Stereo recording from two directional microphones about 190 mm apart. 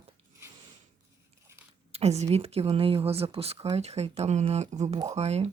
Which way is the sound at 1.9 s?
35° right (ahead or behind).